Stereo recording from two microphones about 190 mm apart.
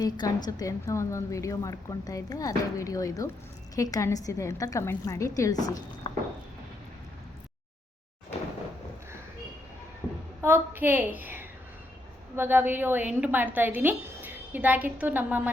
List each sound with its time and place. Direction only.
0.0 s a woman's voice: 20° left (ahead or behind)
10.4 s a woman's voice: 10° right (ahead or behind)